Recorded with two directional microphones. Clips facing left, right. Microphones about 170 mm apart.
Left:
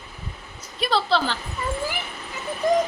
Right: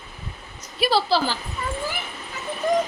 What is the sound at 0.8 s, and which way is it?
Speech, 5° right (ahead or behind).